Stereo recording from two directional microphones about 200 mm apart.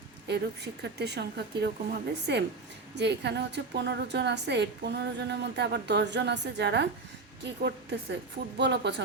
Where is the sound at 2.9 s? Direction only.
60° right (ahead or behind).